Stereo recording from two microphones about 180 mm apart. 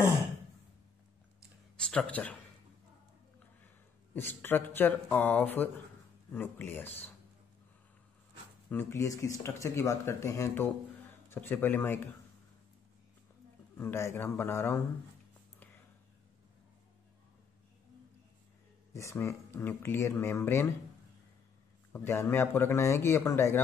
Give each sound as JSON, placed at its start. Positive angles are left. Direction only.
{"t": 1.8, "sound": "speech", "side_deg": 5}
{"t": 3.6, "sound": "a man's voice", "side_deg": 10}
{"t": 8.6, "sound": "speech", "side_deg": 15}
{"t": 13.7, "sound": "speech", "side_deg": 15}
{"t": 18.9, "sound": "speech", "side_deg": 15}
{"t": 21.9, "sound": "speech", "side_deg": 15}